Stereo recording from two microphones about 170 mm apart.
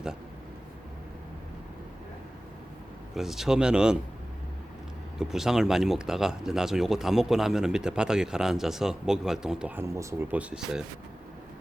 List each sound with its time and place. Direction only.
3.2 s speech: centre (ahead or behind)
5.1 s speech: 5° right (ahead or behind)